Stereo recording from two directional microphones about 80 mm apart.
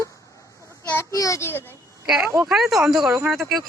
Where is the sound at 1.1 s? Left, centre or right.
Left.